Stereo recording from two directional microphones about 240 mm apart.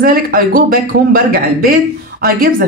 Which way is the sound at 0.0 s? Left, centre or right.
Right.